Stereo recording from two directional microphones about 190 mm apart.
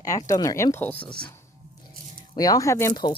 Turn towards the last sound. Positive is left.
turn(degrees=20)  # may be behind; listen again after turning